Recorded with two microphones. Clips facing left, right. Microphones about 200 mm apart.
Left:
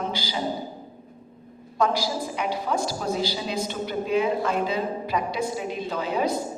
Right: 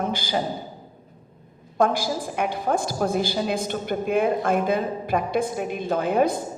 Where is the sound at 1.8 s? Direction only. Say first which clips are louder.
Right 2 dB; 50° right (ahead or behind).